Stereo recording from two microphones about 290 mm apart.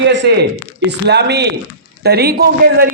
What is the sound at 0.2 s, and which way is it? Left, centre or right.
Speech, right.